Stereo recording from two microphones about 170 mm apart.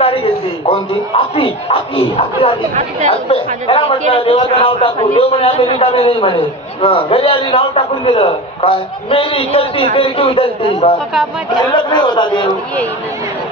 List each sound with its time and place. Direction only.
0.0 s a sound: 35° left (ahead or behind)
2.7 s speech: 45° right (ahead or behind)
3.1 s a man's voice: 35° left (ahead or behind)